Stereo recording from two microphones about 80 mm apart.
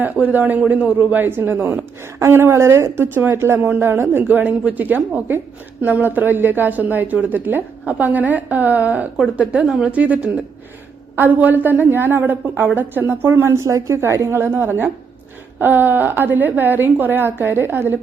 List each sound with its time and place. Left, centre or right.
0.0 s a woman's voice: right